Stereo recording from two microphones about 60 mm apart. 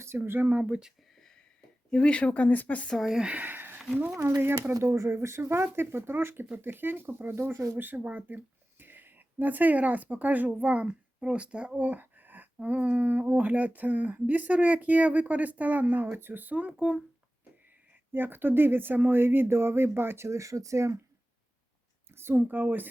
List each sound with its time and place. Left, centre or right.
0.3 s speech: right
0.6 s speech: centre
1.9 s speech: centre
3.1 s speech: centre
3.3 s a sound: right
4.8 s speech: right
7.5 s speech: right
7.8 s speech: right
11.8 s a sound: right
12.5 s speech: right
16.7 s speech: centre
18.1 s speech: right
22.1 s speech: right